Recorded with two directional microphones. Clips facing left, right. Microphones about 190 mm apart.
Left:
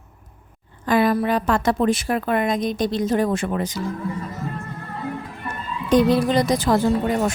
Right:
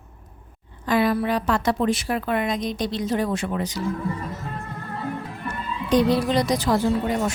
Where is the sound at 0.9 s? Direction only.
45° left (ahead or behind).